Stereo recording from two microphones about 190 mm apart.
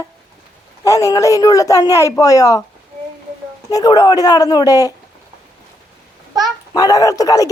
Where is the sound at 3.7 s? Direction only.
20° left (ahead or behind).